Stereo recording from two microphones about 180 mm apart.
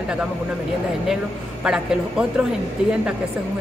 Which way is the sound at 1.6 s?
5° right (ahead or behind).